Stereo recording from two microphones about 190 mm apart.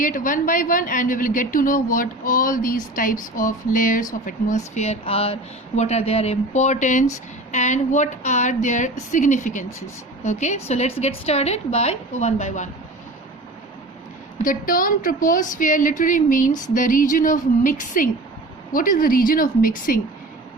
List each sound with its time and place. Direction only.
0.0 s a woman's voice: 45° left (ahead or behind)
14.3 s a woman's voice: 45° left (ahead or behind)